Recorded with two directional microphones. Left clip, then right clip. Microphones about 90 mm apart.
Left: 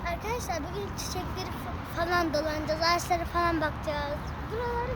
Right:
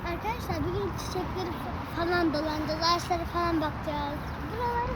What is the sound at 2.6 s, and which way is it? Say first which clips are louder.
A child's voice: even; 40° left (ahead or behind).